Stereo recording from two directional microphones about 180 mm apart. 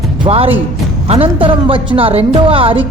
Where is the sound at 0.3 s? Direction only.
30° right (ahead or behind).